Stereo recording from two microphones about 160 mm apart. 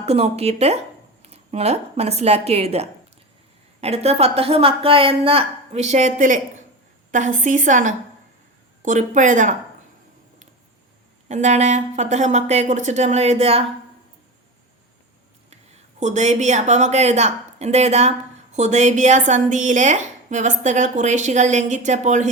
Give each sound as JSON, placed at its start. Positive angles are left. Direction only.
{"t": 0.0, "sound": "a woman's voice", "side_deg": -40}
{"t": 11.3, "sound": "a woman's voice", "side_deg": -45}
{"t": 16.0, "sound": "a woman's voice", "side_deg": -45}